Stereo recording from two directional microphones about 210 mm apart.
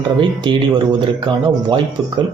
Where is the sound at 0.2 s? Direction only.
20° right (ahead or behind).